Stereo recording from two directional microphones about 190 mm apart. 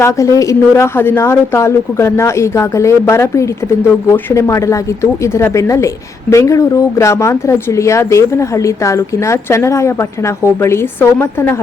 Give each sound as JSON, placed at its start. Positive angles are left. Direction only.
{"t": 0.0, "sound": "speech", "side_deg": 15}